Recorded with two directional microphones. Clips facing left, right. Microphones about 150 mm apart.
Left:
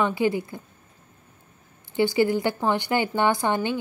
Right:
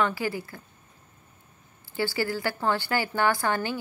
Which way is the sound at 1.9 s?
20° left (ahead or behind).